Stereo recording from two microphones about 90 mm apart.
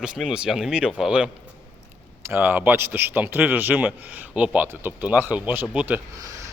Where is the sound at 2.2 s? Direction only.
25° right (ahead or behind).